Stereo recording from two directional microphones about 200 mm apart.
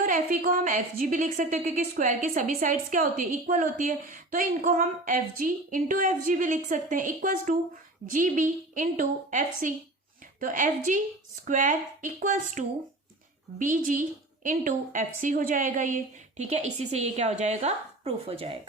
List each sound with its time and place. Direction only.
0.0 s a woman's voice: 45° right (ahead or behind)